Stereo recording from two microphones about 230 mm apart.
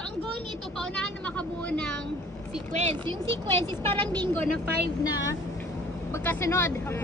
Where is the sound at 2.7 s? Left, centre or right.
Right.